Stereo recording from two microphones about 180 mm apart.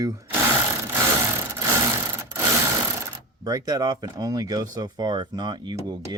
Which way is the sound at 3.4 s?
20° right (ahead or behind).